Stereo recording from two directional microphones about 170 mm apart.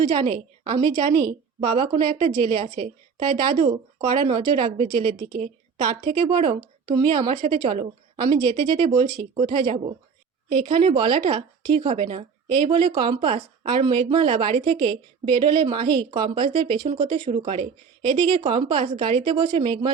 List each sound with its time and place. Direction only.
0.3 s a woman's voice: 30° right (ahead or behind)